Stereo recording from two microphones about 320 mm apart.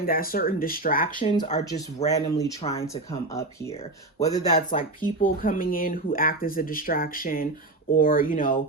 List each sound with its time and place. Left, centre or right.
0.0 s speech: left; by 4.5 s centre
4.5 s speech: left